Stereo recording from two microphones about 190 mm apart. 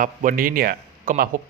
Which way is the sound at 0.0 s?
45° right (ahead or behind).